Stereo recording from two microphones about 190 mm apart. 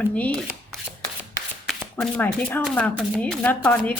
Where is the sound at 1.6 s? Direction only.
5° left (ahead or behind).